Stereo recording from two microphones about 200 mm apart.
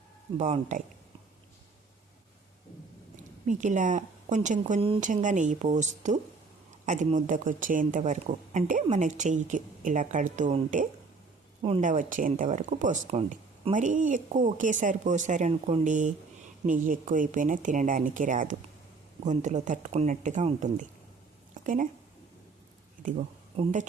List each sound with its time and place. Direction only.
0.3 s speech: 35° right (ahead or behind)
3.2 s speech: 40° right (ahead or behind)
21.5 s a sound: 40° right (ahead or behind)
23.0 s speech: 40° right (ahead or behind)